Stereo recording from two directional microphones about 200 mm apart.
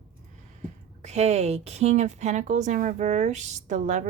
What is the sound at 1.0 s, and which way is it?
A woman's voice, 35° right (ahead or behind).